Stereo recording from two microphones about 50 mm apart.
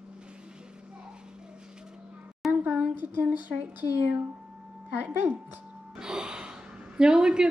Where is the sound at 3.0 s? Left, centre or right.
Right.